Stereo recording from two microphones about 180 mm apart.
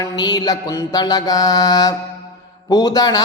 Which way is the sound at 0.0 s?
20° left (ahead or behind).